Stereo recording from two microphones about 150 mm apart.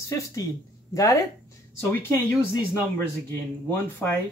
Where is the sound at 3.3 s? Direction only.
15° left (ahead or behind).